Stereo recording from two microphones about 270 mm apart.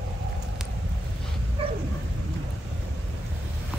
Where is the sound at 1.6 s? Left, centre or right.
Right.